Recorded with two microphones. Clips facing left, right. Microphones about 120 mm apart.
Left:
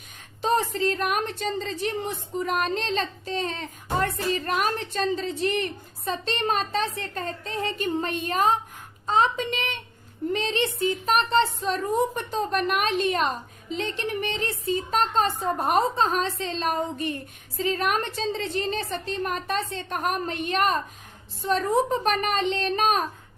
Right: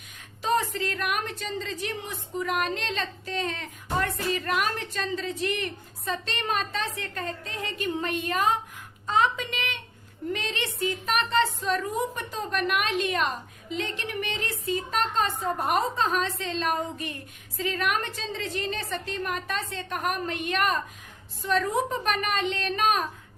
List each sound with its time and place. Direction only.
0.4 s a woman's voice: 30° left (ahead or behind)